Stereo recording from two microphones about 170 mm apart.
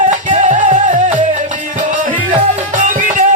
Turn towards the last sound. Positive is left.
turn(degrees=-50)  # may be behind; listen again after turning